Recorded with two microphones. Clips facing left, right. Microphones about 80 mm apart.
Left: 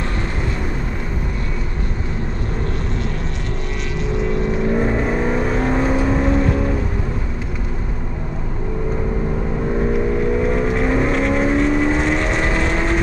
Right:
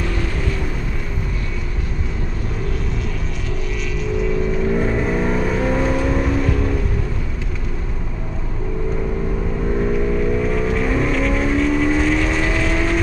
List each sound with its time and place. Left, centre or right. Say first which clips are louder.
4.5 s vehicle: left 1 dB; centre
9.8 s vehicle: left 1 dB; centre